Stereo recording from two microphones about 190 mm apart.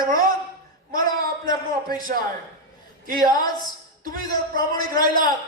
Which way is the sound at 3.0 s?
50° right (ahead or behind).